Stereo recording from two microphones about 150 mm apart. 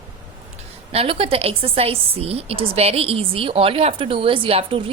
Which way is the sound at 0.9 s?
40° right (ahead or behind).